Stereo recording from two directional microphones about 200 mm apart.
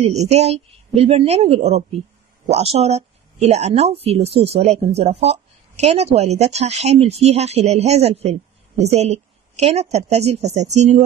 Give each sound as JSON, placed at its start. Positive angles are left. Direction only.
{"t": 0.0, "sound": "speech", "side_deg": -30}